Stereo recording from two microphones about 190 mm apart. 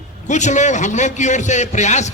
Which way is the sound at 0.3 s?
40° left (ahead or behind).